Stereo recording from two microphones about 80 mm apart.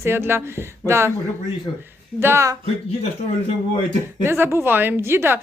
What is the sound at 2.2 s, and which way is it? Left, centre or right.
Speech, right.